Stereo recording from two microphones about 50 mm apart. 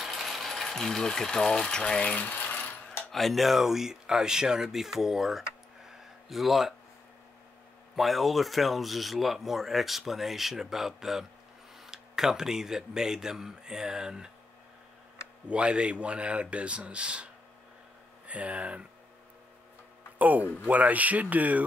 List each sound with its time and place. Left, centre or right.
0.0 s speech: centre
2.0 s coin: left
3.1 s speech: centre
5.9 s a sound: centre
7.9 s speech: centre
15.4 s speech: right
20.2 s speech: right